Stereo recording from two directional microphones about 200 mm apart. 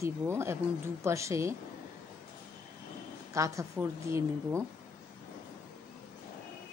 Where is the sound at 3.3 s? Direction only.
15° right (ahead or behind).